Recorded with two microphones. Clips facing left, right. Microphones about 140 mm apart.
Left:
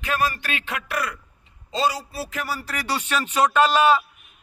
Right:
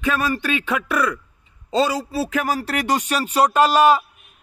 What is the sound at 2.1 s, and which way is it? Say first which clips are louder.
Speech: right 8 dB; 90° right.